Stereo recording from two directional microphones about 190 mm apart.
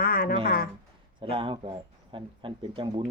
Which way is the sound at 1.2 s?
30° right (ahead or behind).